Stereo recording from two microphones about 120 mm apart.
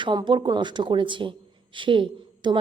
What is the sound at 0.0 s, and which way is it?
A woman's voice, 40° right (ahead or behind).